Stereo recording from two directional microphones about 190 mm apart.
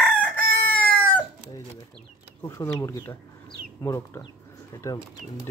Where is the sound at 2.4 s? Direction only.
15° left (ahead or behind).